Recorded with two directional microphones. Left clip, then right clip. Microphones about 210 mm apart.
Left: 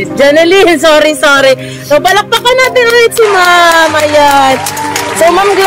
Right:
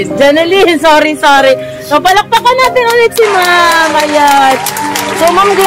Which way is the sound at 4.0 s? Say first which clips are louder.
Left 1 dB; 50° left (ahead or behind).